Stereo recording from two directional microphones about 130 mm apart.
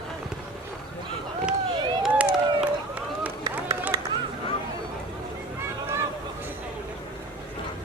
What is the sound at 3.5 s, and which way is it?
Run, 10° right (ahead or behind).